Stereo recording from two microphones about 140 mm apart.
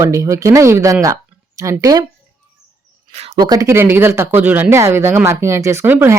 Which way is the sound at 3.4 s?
30° right (ahead or behind).